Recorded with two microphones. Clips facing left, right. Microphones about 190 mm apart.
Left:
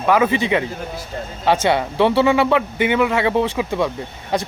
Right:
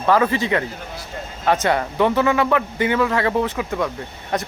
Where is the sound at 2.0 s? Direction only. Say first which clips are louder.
Left 3 dB; 25° left (ahead or behind).